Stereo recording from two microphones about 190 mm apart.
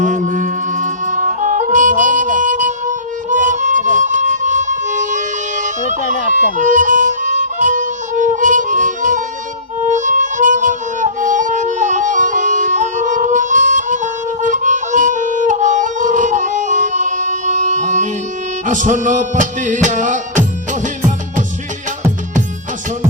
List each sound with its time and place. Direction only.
0.0 s music: 40° right (ahead or behind)